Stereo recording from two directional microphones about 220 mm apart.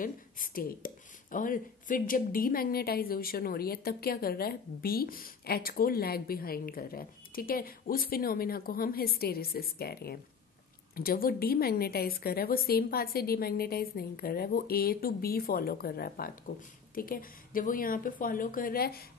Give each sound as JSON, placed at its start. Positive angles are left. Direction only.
{"t": 0.0, "sound": "speech", "side_deg": 40}